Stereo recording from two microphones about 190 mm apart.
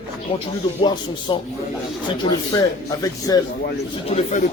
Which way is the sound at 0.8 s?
25° left (ahead or behind).